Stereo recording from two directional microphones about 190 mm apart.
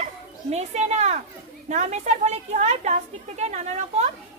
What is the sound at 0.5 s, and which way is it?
Speech, 35° right (ahead or behind).